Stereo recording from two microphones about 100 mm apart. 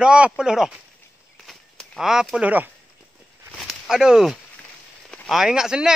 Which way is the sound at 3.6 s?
5° right (ahead or behind).